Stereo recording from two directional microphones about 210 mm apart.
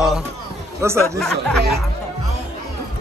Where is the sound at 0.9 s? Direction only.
5° left (ahead or behind).